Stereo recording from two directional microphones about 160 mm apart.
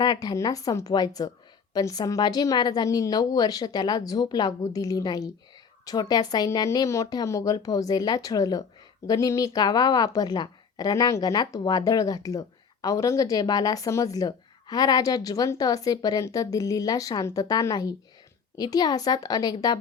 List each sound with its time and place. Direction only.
0.0 s a woman's voice: 25° left (ahead or behind)